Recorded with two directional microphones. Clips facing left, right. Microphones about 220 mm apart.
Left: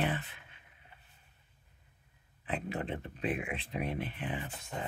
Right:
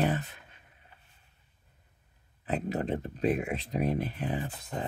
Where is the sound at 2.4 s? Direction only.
40° right (ahead or behind).